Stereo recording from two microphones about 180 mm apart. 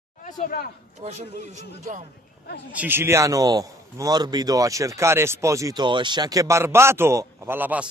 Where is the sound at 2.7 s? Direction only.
10° right (ahead or behind).